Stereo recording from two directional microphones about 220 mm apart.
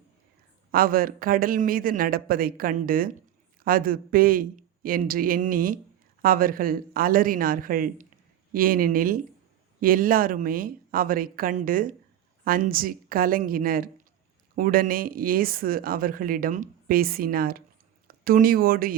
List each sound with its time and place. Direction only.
0.7 s speech: 40° right (ahead or behind)